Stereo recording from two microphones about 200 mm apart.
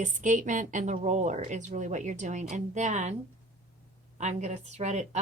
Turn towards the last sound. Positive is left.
turn(degrees=-35)  # may be behind; listen again after turning